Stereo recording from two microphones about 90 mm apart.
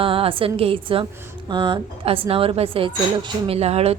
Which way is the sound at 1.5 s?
60° right (ahead or behind).